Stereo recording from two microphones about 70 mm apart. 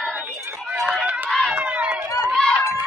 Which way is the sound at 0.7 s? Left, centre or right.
Centre.